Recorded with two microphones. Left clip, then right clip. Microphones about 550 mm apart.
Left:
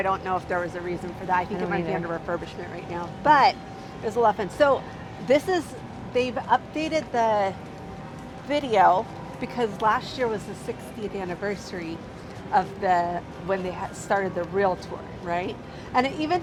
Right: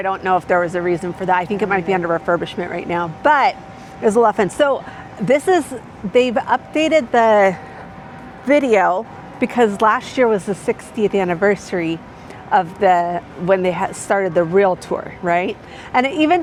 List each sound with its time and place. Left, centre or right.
0.0 s a woman's voice: right